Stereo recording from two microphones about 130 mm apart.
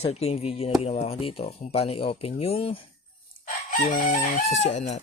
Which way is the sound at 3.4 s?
90° left.